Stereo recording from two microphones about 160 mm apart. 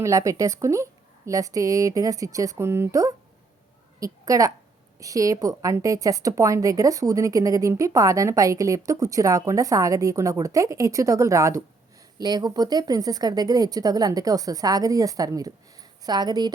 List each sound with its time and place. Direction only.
0.0 s a woman's voice: 20° right (ahead or behind)